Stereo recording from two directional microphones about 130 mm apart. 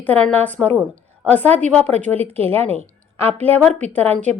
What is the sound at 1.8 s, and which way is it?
Speech, 60° right (ahead or behind).